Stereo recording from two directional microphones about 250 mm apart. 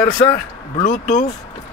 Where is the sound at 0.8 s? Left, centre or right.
Left.